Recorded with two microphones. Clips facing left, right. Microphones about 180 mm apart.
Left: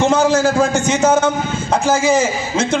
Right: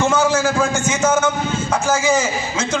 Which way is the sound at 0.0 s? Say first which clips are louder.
Left 3 dB; 35° left (ahead or behind).